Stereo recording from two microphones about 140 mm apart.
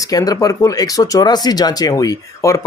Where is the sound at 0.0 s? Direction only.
25° left (ahead or behind).